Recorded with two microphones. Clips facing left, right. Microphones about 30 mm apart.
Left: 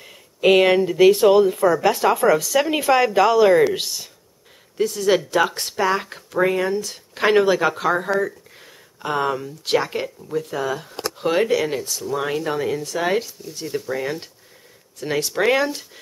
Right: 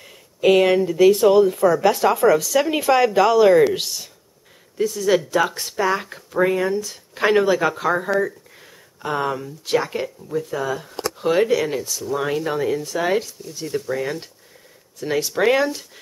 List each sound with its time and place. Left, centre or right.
0.0 s speech: centre
4.9 s speech: centre
6.9 s speech: left
8.1 s speech: centre
8.5 s a sound: centre
9.8 s speech: centre